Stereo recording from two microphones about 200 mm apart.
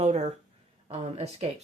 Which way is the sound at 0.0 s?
35° right (ahead or behind).